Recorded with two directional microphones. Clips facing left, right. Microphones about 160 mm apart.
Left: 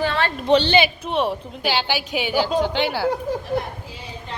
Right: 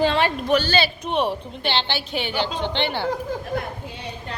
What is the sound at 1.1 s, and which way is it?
A woman's voice, centre (ahead or behind).